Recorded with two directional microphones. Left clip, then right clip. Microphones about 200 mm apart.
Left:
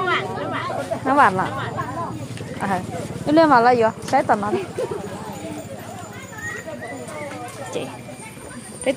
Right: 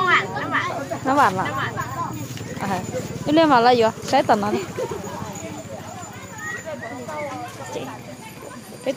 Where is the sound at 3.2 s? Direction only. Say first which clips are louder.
Left 1 dB; 5° left (ahead or behind); by 4.5 s 15° right (ahead or behind).